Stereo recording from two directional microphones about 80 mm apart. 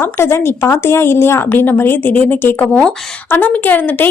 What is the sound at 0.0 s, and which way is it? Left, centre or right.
A woman's voice, left.